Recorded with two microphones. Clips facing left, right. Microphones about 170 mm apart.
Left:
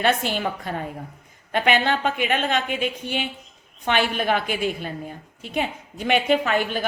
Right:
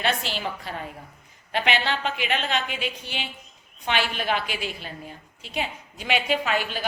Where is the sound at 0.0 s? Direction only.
50° left (ahead or behind).